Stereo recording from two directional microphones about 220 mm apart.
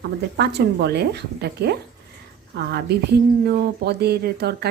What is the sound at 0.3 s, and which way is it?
Speech, 50° right (ahead or behind).